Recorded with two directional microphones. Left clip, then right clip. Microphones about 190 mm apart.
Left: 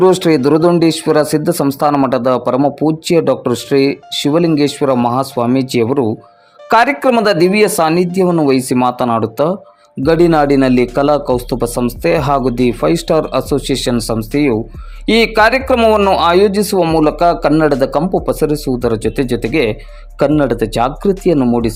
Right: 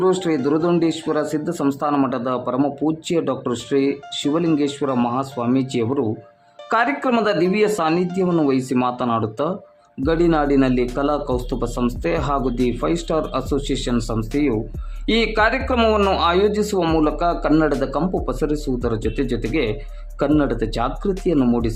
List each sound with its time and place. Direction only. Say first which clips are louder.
0.0 s a man's voice: left 9 dB; 30° left (ahead or behind)